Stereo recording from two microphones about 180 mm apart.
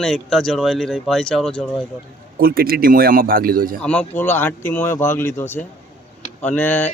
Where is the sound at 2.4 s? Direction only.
55° right (ahead or behind).